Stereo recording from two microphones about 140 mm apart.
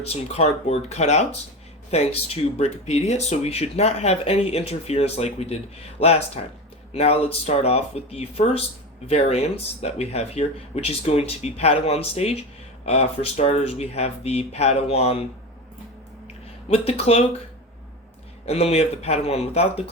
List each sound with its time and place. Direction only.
0.0 s speech: 45° left (ahead or behind)
16.2 s a sound: 45° left (ahead or behind)
18.4 s speech: 45° left (ahead or behind)